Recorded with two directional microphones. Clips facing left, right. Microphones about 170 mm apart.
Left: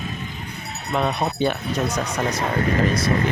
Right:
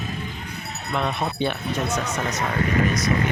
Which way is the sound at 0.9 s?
40° left (ahead or behind).